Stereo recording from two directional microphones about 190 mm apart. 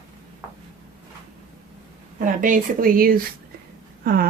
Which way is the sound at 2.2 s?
45° right (ahead or behind).